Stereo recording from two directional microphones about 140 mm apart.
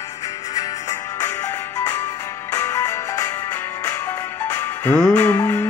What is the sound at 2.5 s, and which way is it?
Music, 20° left (ahead or behind).